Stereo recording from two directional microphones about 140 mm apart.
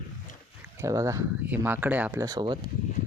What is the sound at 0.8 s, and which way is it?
Speech, 20° right (ahead or behind).